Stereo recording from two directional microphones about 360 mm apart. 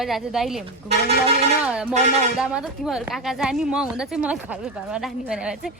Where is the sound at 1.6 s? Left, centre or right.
Centre.